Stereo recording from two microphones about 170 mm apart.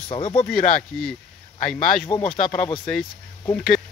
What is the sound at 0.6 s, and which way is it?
Speech, 55° left (ahead or behind).